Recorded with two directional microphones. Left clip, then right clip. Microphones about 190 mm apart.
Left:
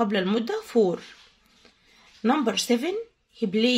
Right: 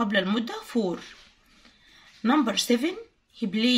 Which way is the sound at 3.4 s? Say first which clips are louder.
Left 4 dB; 35° left (ahead or behind).